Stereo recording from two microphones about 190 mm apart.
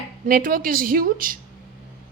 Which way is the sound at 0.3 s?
50° right (ahead or behind).